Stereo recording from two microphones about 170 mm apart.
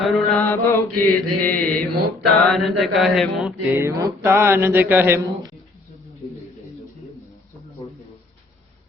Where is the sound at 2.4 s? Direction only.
Centre (ahead or behind).